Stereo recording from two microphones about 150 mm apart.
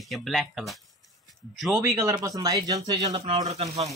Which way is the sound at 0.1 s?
Centre (ahead or behind).